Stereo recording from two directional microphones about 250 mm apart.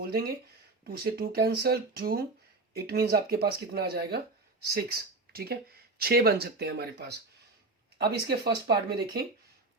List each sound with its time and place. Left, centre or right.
0.0 s speech: right